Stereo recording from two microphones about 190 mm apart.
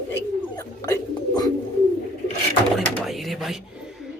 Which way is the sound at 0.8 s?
20° left (ahead or behind).